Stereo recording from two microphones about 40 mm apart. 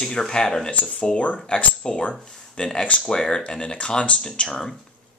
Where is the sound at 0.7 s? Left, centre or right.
Left.